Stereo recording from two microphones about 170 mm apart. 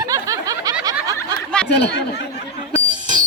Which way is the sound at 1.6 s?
80° left.